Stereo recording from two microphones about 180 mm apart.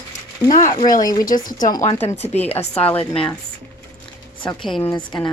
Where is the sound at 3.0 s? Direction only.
30° left (ahead or behind).